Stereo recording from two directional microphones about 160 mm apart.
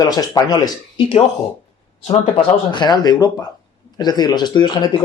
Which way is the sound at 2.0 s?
35° left (ahead or behind).